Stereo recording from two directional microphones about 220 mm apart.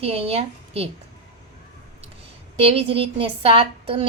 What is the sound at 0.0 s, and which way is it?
Speech, 25° right (ahead or behind).